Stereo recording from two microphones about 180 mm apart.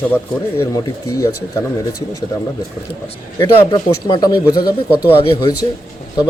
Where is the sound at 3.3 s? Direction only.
20° left (ahead or behind).